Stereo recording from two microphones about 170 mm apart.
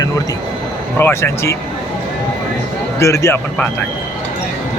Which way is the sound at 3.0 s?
15° left (ahead or behind).